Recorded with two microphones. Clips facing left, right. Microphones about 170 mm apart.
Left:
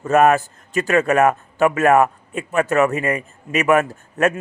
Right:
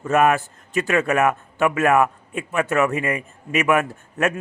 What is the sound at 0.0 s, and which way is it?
A man's voice, 40° left (ahead or behind).